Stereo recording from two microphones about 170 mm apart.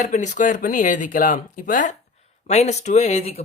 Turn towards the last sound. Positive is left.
turn(degrees=40)  # may be behind; listen again after turning